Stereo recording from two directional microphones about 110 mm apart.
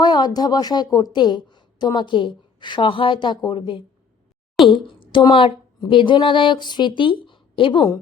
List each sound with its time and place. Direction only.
0.0 s a woman's voice: 40° left (ahead or behind)